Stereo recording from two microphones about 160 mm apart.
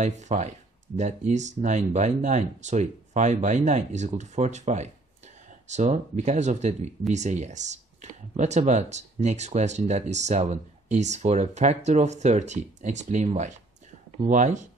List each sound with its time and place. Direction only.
0.0 s speech: 45° right (ahead or behind)